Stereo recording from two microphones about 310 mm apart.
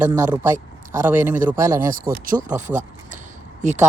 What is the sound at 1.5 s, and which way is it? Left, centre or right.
Speech, centre.